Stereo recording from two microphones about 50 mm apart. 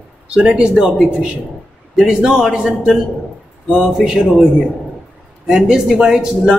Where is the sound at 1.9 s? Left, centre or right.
Centre.